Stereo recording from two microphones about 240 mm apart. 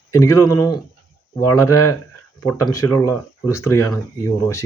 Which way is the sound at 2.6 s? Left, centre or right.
Centre.